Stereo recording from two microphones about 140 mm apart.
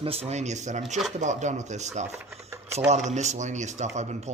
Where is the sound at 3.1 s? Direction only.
55° right (ahead or behind).